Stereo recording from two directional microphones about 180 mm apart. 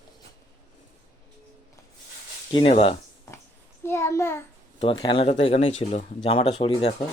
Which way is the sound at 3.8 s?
15° left (ahead or behind).